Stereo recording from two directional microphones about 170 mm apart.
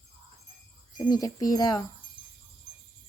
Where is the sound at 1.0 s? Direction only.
20° left (ahead or behind).